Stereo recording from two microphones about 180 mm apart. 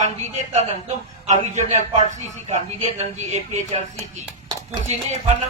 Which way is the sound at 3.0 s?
40° right (ahead or behind).